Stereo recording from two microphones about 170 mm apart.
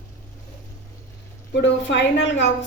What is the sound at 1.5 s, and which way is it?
A woman's voice, 90° left.